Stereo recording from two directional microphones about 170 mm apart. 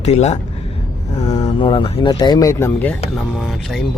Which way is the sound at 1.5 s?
30° left (ahead or behind).